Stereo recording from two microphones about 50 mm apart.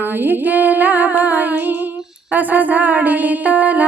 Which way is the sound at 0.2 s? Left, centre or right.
Right.